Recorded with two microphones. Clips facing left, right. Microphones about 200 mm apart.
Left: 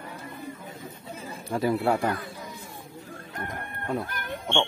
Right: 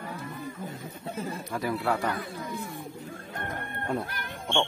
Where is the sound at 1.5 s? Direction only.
30° left (ahead or behind).